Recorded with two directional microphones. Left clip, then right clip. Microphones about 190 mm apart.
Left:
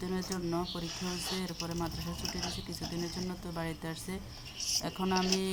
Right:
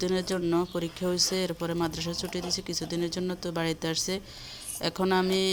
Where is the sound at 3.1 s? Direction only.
35° right (ahead or behind).